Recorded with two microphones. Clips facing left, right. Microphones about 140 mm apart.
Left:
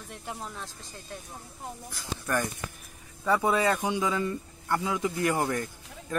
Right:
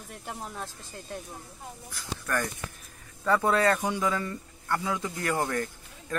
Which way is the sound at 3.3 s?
15° left (ahead or behind).